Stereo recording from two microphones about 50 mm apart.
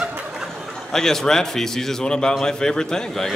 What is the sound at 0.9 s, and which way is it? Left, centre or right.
A man's voice, centre.